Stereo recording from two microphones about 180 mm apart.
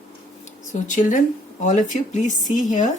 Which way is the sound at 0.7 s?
45° left (ahead or behind).